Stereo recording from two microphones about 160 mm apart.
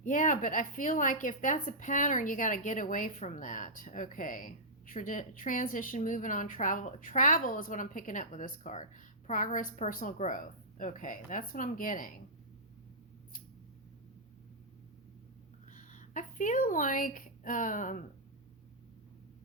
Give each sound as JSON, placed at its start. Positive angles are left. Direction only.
{"t": 0.0, "sound": "a woman's voice", "side_deg": 55}
{"t": 15.7, "sound": "speech", "side_deg": 50}